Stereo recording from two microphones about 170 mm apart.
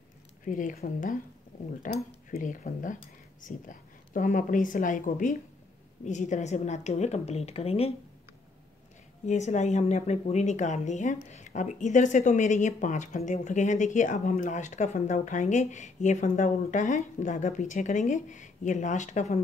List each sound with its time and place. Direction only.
0.5 s speech: 50° left (ahead or behind)
1.5 s a sound: 50° left (ahead or behind)
2.3 s a woman's voice: 50° left (ahead or behind)
9.2 s speech: 45° left (ahead or behind)